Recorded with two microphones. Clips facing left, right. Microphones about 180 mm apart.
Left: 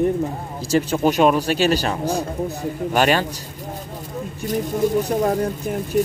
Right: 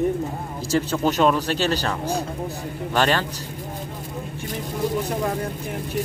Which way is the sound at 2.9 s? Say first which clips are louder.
Left 3 dB; 15° left (ahead or behind).